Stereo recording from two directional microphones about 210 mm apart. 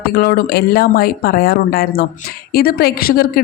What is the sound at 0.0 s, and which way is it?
A woman's voice, 45° left (ahead or behind).